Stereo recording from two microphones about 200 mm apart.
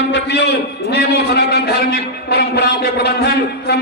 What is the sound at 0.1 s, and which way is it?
A man's voice, 60° left (ahead or behind).